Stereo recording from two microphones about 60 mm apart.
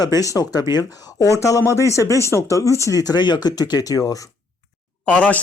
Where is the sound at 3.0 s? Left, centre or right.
Left.